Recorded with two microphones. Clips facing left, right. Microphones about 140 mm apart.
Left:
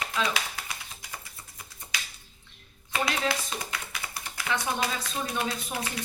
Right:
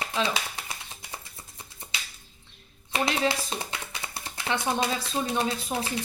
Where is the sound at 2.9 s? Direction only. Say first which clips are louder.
Right 3 dB; 30° right (ahead or behind).